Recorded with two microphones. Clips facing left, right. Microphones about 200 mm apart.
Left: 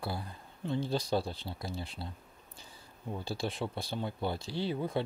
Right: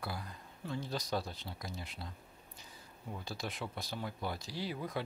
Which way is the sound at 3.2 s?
30° left (ahead or behind).